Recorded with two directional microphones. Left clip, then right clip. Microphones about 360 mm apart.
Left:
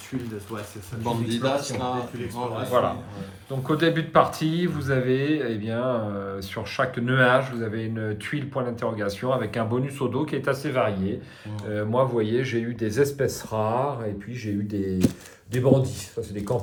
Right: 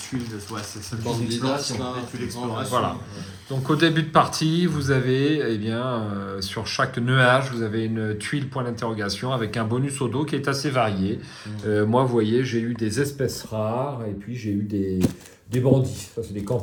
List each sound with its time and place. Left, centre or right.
1.5 s speech: centre
2.7 s speech: centre